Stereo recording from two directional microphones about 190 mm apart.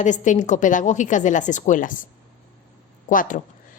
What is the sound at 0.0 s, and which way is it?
A woman's voice, 40° left (ahead or behind).